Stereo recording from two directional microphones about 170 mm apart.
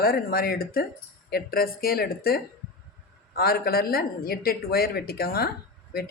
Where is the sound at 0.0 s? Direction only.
60° left (ahead or behind).